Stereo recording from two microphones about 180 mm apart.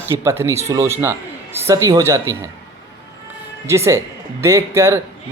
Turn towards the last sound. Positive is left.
turn(degrees=-15)  # may be behind; listen again after turning